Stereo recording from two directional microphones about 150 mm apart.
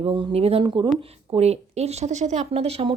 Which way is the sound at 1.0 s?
45° right (ahead or behind).